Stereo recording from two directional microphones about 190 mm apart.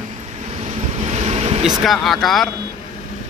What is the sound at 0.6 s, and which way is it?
Vehicle, 35° right (ahead or behind).